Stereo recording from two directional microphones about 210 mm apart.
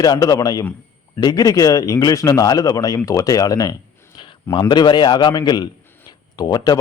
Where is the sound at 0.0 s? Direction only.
15° left (ahead or behind).